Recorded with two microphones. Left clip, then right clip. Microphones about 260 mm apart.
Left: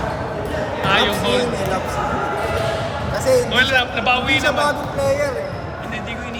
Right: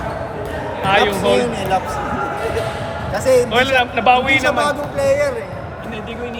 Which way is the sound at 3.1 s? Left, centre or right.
Right.